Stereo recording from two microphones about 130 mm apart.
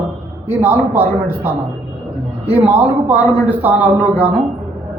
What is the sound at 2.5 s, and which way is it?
Speech, 15° right (ahead or behind).